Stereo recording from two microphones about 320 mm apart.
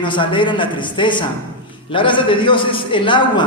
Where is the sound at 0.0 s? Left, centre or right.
Centre.